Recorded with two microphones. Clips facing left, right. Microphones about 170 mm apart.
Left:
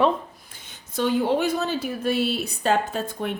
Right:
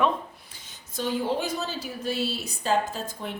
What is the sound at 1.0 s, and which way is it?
Speech, 65° left (ahead or behind).